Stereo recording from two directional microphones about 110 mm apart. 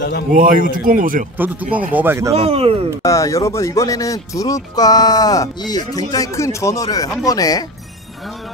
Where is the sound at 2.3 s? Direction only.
65° right (ahead or behind).